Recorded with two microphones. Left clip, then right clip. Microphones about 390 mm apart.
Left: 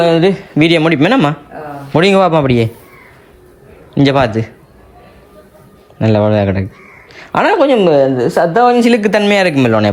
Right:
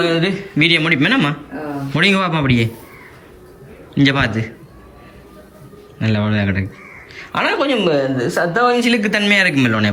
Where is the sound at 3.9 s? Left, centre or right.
Centre.